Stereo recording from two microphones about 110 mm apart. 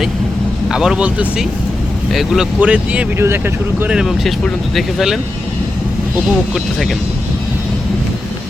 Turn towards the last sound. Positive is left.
turn(degrees=0)  # may be behind; listen again after turning